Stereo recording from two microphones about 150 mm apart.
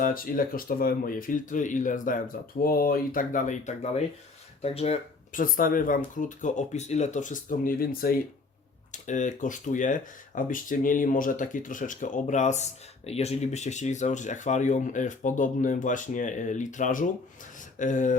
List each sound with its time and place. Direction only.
0.0 s speech: 70° left (ahead or behind); by 4.9 s 45° left (ahead or behind)
5.3 s speech: 70° left (ahead or behind)
8.9 s speech: 55° left (ahead or behind)